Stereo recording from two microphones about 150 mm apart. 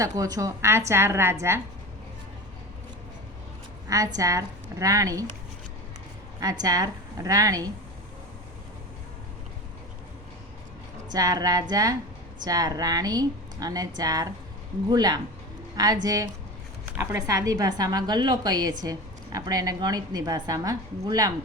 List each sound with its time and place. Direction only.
0.0 s a woman's voice: 20° right (ahead or behind)
3.8 s a woman's voice: 20° right (ahead or behind)
6.4 s a woman's voice: 25° right (ahead or behind)
11.1 s a woman's voice: 25° right (ahead or behind)